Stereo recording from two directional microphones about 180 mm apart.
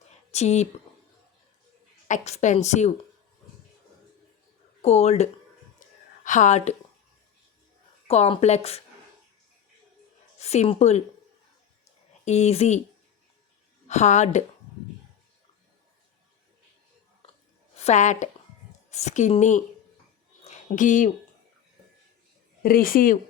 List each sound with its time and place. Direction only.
0.3 s speech: 40° left (ahead or behind)
2.0 s a woman's voice: 40° left (ahead or behind)
4.8 s a woman's voice: 35° left (ahead or behind)
5.8 s a sound: 45° left (ahead or behind)
6.2 s a woman's voice: 45° left (ahead or behind)
8.0 s a woman's voice: 35° left (ahead or behind)
10.3 s a woman's voice: 35° left (ahead or behind)
12.2 s a woman's voice: 40° left (ahead or behind)
13.8 s a woman's voice: 40° left (ahead or behind)
17.7 s a woman's voice: 40° left (ahead or behind)
20.4 s a sound: 45° left (ahead or behind)
22.6 s speech: 55° left (ahead or behind)